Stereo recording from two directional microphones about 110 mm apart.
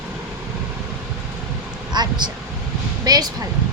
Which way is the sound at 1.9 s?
40° right (ahead or behind).